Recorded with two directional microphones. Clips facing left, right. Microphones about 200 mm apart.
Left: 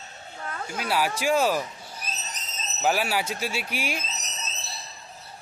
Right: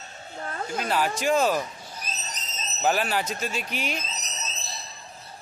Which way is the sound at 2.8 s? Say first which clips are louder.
Even; 10° left (ahead or behind).